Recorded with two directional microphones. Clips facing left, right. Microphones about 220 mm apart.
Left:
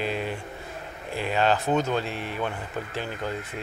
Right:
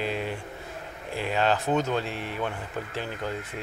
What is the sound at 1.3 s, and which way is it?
Speech, 25° left (ahead or behind).